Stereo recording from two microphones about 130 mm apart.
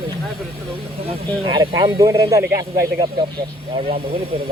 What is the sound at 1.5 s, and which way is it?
Speech, 30° right (ahead or behind).